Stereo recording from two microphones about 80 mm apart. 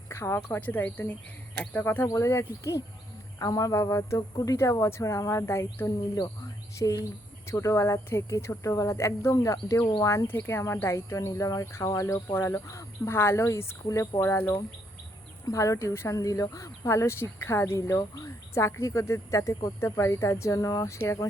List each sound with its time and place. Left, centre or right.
0.1 s speech: left
0.5 s speech: left
2.0 s speech: left
3.3 s speech: left
6.7 s speech: left
10.2 s speech: left
15.4 s speech: left